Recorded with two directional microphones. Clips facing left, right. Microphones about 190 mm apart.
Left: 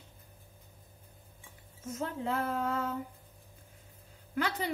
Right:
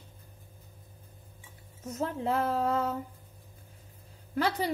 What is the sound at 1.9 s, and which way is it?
Speech, 35° right (ahead or behind).